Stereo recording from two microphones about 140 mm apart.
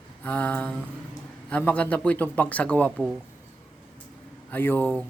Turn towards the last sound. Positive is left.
turn(degrees=15)  # may be behind; listen again after turning